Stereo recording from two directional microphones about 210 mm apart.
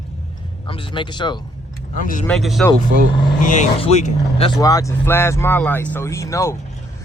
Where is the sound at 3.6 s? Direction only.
30° left (ahead or behind).